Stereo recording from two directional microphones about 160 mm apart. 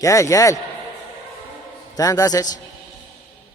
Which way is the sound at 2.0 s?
20° left (ahead or behind).